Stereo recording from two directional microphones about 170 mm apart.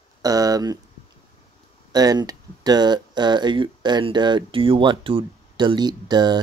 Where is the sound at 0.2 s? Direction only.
20° right (ahead or behind).